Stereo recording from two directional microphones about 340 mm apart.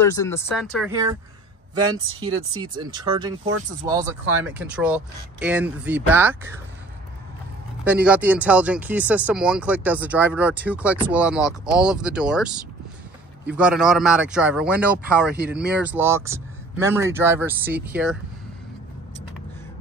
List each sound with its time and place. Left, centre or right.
0.0 s speech: centre
1.8 s speech: right
2.8 s speech: centre
7.8 s speech: centre
13.6 s speech: centre